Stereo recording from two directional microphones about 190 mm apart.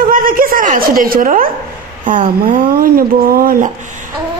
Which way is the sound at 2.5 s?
50° right (ahead or behind).